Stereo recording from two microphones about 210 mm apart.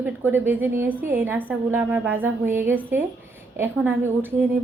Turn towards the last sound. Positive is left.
turn(degrees=-10)  # may be behind; listen again after turning